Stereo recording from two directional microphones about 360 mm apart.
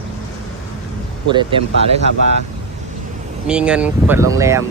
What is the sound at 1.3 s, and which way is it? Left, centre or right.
Speech, centre.